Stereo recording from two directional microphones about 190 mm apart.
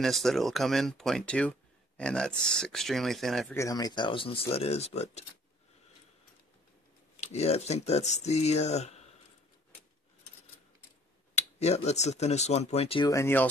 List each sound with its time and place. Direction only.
0.0 s speech: centre (ahead or behind)
3.5 s speech: 20° left (ahead or behind); by 5.2 s 35° left (ahead or behind)
7.2 s speech: 35° left (ahead or behind)
11.3 s speech: 35° left (ahead or behind)
13.1 s speech: 10° left (ahead or behind)